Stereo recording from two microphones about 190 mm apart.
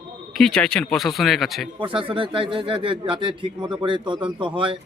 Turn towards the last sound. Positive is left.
turn(degrees=-25)  # may be behind; listen again after turning